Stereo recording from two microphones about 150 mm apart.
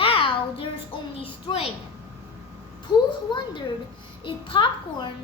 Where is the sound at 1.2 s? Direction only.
35° left (ahead or behind).